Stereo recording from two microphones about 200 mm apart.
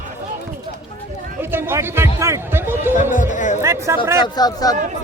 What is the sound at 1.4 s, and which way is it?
Speech, 10° right (ahead or behind).